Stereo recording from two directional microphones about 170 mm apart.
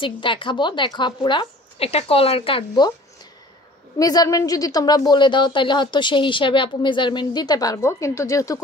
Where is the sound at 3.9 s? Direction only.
20° left (ahead or behind).